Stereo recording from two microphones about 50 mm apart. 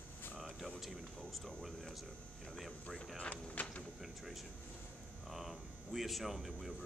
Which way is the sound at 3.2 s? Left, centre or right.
Left.